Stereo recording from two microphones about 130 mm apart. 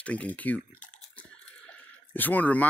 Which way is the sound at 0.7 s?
75° left (ahead or behind).